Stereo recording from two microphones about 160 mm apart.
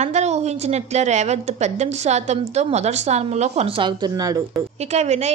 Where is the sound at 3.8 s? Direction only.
25° right (ahead or behind).